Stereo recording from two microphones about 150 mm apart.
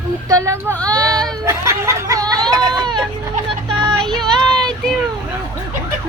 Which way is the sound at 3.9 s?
5° left (ahead or behind).